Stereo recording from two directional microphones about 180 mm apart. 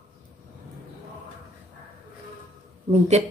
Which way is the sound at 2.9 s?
40° right (ahead or behind).